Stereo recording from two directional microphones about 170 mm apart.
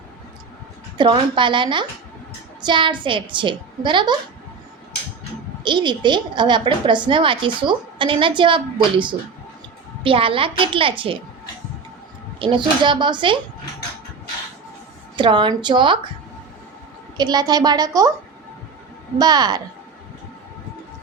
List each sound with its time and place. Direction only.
0.9 s a woman's voice: 30° right (ahead or behind)
5.6 s a woman's voice: 25° right (ahead or behind)
12.4 s a woman's voice: 30° right (ahead or behind)
15.1 s a woman's voice: 30° right (ahead or behind)
17.2 s a woman's voice: 25° right (ahead or behind)
19.2 s a woman's voice: 25° right (ahead or behind)